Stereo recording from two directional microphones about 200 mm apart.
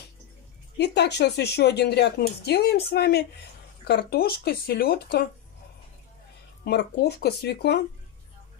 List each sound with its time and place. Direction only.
0.7 s speech: 60° left (ahead or behind)
6.6 s speech: 55° left (ahead or behind)